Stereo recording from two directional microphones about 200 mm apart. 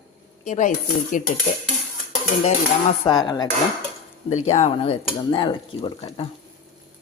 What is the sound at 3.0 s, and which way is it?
Cutlery, 20° left (ahead or behind).